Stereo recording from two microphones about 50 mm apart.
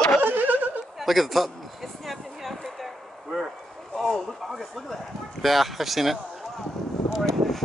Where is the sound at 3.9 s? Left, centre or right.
Centre.